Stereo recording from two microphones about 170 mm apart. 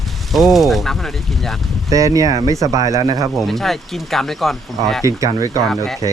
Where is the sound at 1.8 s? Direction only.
20° right (ahead or behind).